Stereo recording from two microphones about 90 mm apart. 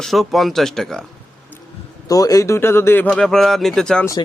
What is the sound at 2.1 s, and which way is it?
A man's voice, 40° left (ahead or behind).